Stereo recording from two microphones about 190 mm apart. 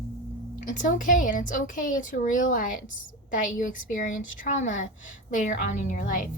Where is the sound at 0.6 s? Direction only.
45° left (ahead or behind).